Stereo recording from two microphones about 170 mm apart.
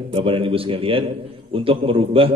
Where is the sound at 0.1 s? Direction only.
30° right (ahead or behind).